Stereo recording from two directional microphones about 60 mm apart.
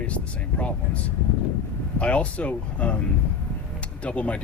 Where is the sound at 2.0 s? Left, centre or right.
Left.